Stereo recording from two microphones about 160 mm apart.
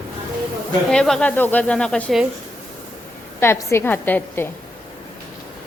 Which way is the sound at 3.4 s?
15° left (ahead or behind).